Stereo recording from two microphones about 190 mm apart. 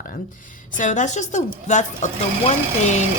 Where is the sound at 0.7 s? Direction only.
40° left (ahead or behind).